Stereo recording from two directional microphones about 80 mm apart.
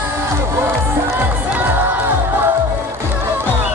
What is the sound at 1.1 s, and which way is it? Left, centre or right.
Music, right.